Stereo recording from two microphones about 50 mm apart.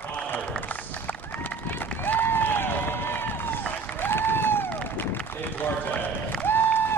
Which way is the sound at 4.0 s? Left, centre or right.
Left.